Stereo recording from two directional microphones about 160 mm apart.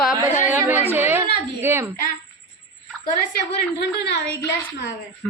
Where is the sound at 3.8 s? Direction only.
90° left.